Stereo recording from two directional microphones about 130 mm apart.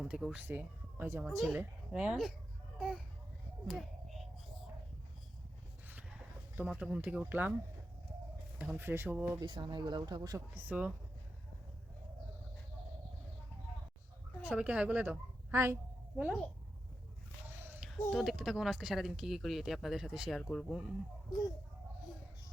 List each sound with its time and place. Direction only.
0.0 s speech: 5° right (ahead or behind)
1.5 s a woman's voice: 10° right (ahead or behind)
3.7 s a sound: centre (ahead or behind)
6.6 s a woman's voice: 5° right (ahead or behind)
9.4 s speech: 35° right (ahead or behind); by 10.9 s 10° right (ahead or behind)
14.5 s a woman's voice: 10° right (ahead or behind)
15.6 s a sound: 15° right (ahead or behind)
17.7 s speech: centre (ahead or behind)